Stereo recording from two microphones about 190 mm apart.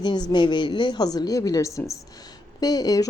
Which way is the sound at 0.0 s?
20° left (ahead or behind).